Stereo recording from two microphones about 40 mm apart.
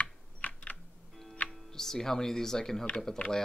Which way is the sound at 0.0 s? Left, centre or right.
Left.